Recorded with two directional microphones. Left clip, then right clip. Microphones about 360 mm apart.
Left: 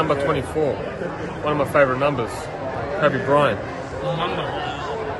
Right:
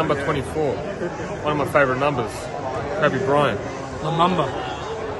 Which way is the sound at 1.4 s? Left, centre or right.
Centre.